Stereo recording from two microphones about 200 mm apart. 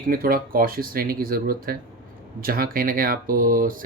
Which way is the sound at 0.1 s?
45° right (ahead or behind).